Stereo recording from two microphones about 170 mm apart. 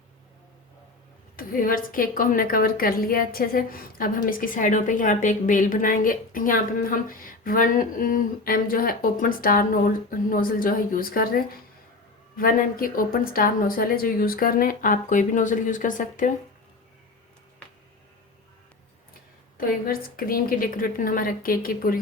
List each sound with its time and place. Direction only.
1.4 s a woman's voice: 55° left (ahead or behind)
19.5 s a woman's voice: 60° left (ahead or behind)